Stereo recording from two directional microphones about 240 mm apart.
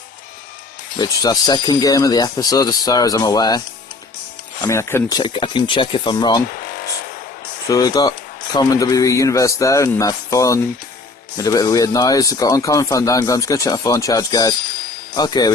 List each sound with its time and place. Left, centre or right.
0.9 s speech: centre
4.6 s speech: centre
7.7 s speech: centre